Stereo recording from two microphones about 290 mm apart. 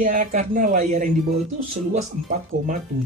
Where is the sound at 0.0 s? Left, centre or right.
Right.